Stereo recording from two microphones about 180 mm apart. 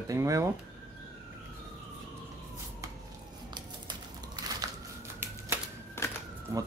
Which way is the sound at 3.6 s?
25° right (ahead or behind).